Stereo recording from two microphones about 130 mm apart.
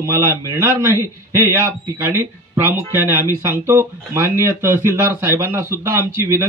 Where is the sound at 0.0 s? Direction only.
20° right (ahead or behind).